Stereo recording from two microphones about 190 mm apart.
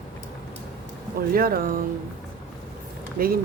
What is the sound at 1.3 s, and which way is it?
Speech, 50° right (ahead or behind).